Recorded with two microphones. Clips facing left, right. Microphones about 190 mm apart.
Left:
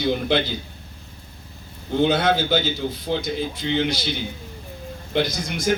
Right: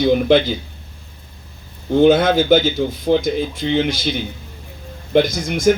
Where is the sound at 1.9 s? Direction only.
50° right (ahead or behind).